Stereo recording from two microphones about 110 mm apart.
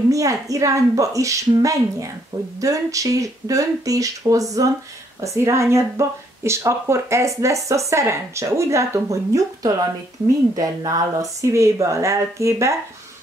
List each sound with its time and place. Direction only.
0.1 s a woman's voice: 30° right (ahead or behind)